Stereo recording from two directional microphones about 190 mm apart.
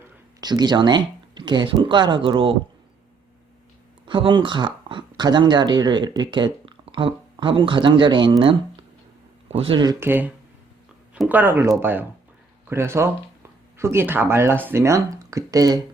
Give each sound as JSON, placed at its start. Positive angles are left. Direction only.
{"t": 0.0, "sound": "speech", "side_deg": -20}
{"t": 4.0, "sound": "speech", "side_deg": -25}